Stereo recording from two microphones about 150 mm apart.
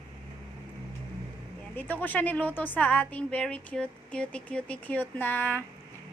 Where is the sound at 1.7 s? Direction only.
10° left (ahead or behind).